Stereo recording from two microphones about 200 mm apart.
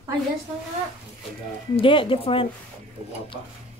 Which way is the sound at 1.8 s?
25° left (ahead or behind).